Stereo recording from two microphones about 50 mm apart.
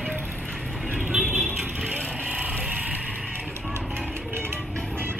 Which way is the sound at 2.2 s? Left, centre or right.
Right.